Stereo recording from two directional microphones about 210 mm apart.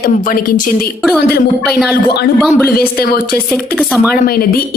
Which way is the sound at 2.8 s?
45° left (ahead or behind).